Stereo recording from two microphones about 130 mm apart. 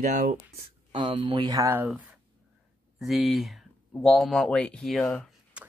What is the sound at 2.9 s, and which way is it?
Speech, centre (ahead or behind).